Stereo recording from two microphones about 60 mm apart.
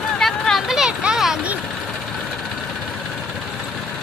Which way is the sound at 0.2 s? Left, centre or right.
Centre.